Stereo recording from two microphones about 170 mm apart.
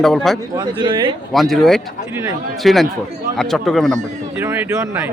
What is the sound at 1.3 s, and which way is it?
Speech, centre (ahead or behind).